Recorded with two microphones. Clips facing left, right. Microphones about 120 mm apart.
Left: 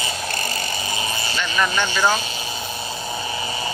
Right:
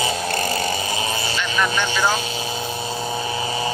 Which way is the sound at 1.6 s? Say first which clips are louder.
Left 1 dB; 5° right (ahead or behind).